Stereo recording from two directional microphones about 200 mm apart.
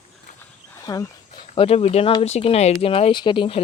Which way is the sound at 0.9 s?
20° left (ahead or behind).